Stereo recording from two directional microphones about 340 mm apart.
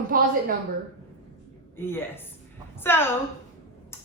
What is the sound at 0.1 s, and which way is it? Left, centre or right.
Speech, right.